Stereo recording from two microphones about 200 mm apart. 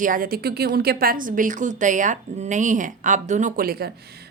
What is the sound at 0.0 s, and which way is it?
A woman's voice, 45° right (ahead or behind).